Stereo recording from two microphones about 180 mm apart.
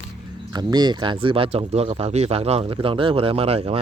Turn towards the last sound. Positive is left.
turn(degrees=-35)  # may be behind; listen again after turning